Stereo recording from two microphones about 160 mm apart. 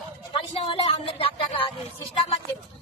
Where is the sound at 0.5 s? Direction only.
35° left (ahead or behind).